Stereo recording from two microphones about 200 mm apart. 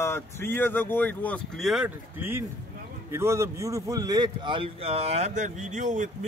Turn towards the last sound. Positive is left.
turn(degrees=-40)  # may be behind; listen again after turning